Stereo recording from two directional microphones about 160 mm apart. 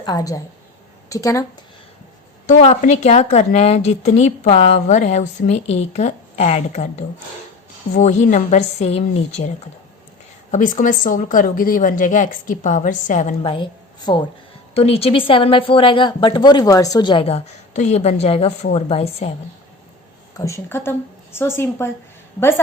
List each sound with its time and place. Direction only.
0.0 s a woman's voice: 25° left (ahead or behind)
2.5 s speech: 50° left (ahead or behind)
7.9 s speech: 50° left (ahead or behind)
10.5 s speech: 50° left (ahead or behind)
13.4 s a woman's voice: 30° left (ahead or behind)
20.3 s a woman's voice: 20° left (ahead or behind)